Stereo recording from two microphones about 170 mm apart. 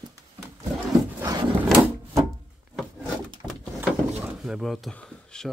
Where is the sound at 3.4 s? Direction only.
5° left (ahead or behind).